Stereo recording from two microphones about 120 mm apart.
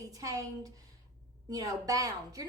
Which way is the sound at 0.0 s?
30° right (ahead or behind).